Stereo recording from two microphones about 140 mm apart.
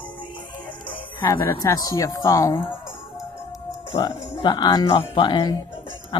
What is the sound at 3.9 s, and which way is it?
Speech, 30° left (ahead or behind).